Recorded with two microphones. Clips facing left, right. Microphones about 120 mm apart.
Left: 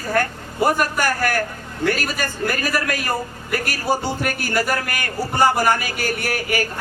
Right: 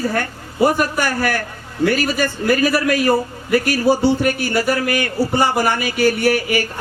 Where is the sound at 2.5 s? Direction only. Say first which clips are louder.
Right 7 dB; 45° left (ahead or behind).